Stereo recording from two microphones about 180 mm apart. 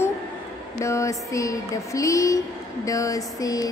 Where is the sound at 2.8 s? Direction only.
20° left (ahead or behind).